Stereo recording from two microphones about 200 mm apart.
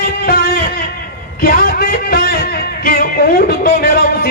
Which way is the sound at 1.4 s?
50° left (ahead or behind).